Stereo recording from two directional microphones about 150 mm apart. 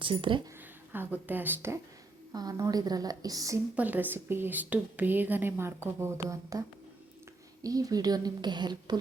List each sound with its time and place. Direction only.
0.0 s a woman's voice: 35° right (ahead or behind)
0.9 s a woman's voice: 10° right (ahead or behind)
2.3 s speech: 25° right (ahead or behind)
3.8 s a woman's voice: 10° right (ahead or behind)
7.6 s speech: 25° right (ahead or behind)